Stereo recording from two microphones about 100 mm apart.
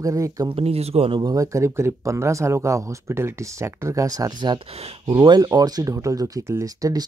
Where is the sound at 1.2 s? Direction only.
35° right (ahead or behind).